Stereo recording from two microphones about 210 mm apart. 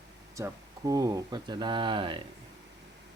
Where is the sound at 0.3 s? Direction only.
15° right (ahead or behind).